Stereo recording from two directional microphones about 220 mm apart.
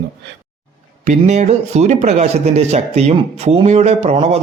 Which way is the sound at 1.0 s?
35° right (ahead or behind).